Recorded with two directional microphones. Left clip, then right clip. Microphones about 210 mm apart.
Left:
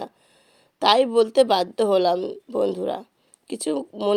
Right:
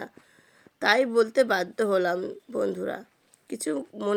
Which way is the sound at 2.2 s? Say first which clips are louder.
Left 5 dB; centre (ahead or behind).